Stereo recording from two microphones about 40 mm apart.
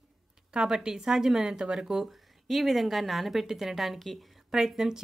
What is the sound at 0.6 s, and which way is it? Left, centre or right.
A woman's voice, centre.